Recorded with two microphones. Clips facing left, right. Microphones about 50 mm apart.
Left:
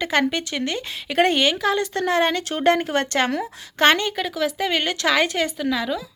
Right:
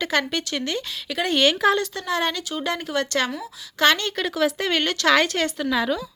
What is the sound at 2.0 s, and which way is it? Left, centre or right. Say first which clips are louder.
Speech: left 5 dB; left.